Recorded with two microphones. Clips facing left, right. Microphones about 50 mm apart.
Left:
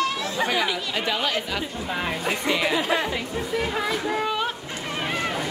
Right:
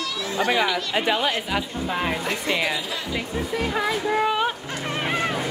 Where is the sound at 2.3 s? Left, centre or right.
Centre.